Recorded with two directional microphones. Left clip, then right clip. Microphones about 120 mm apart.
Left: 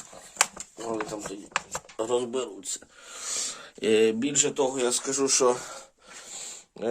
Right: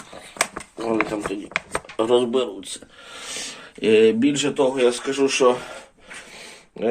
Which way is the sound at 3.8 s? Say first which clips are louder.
Right 7 dB; 40° left (ahead or behind).